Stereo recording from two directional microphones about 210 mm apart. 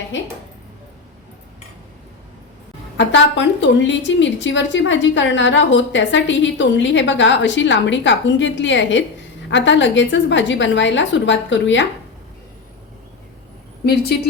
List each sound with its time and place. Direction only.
3.0 s a woman's voice: 60° left (ahead or behind)
13.8 s a woman's voice: 50° left (ahead or behind)